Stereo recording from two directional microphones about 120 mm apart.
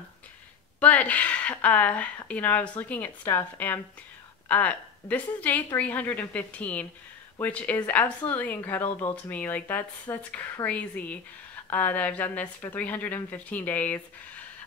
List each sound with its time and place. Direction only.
0.7 s a woman's voice: 10° left (ahead or behind)